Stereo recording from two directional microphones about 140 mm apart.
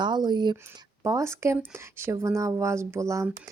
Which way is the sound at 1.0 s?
20° right (ahead or behind).